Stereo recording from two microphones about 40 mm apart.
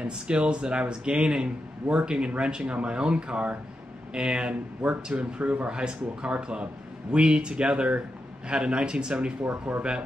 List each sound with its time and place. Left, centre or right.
0.0 s speech: right
9.4 s speech: right